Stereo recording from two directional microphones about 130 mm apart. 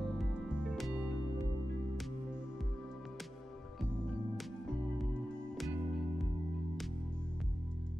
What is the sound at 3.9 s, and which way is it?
Music, 5° left (ahead or behind).